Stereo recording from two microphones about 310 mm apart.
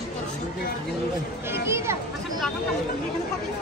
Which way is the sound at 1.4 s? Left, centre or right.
Centre.